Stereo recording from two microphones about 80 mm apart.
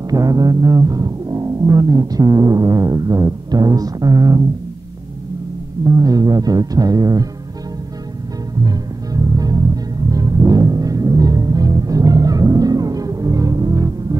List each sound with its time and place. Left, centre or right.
0.1 s speech: right
5.9 s speech: right
8.6 s music: right